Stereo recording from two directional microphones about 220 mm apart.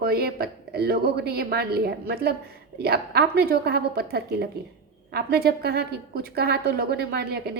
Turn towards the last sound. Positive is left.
turn(degrees=-45)  # may be behind; listen again after turning